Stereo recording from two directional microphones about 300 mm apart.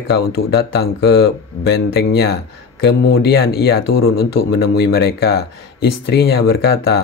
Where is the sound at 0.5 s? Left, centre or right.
Left.